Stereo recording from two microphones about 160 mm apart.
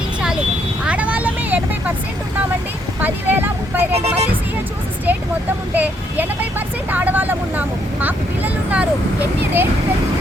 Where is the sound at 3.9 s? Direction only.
40° right (ahead or behind).